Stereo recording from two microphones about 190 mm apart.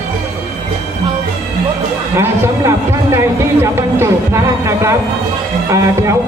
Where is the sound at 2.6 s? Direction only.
15° right (ahead or behind).